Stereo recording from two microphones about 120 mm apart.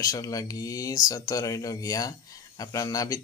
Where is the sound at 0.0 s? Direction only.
30° left (ahead or behind).